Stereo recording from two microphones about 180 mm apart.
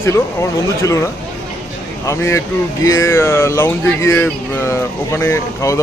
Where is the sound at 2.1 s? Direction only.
15° left (ahead or behind).